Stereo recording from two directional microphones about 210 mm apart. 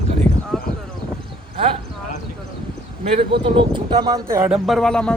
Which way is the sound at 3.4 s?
25° right (ahead or behind).